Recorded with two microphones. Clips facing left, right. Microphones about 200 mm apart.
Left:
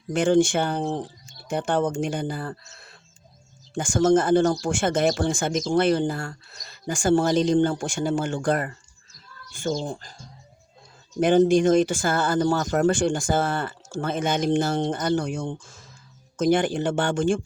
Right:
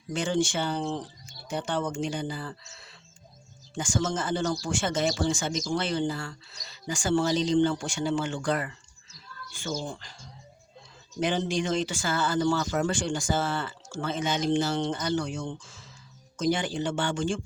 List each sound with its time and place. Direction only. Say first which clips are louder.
0.1 s speech: left 8 dB; 55° left (ahead or behind)
11.2 s speech: left 10 dB; 50° left (ahead or behind)